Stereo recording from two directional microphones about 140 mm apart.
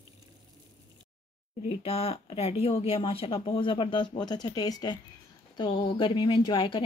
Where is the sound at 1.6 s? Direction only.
45° left (ahead or behind).